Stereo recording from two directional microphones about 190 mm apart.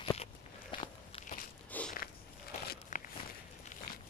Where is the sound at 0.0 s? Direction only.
30° left (ahead or behind).